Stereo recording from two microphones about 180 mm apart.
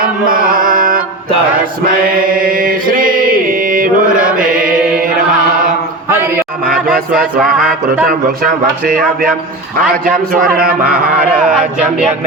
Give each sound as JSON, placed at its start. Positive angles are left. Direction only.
{"t": 0.0, "sound": "chant", "side_deg": -50}
{"t": 2.1, "sound": "mantra", "side_deg": -50}
{"t": 8.0, "sound": "speech", "side_deg": -55}
{"t": 11.4, "sound": "speech", "side_deg": -5}